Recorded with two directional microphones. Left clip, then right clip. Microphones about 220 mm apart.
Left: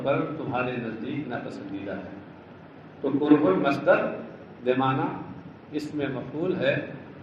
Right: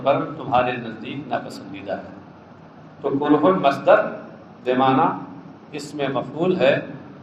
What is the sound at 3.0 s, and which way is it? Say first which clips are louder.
A man's voice: right 4 dB; 35° right (ahead or behind).